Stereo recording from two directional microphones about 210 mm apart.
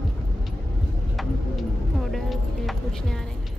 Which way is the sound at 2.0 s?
Centre (ahead or behind).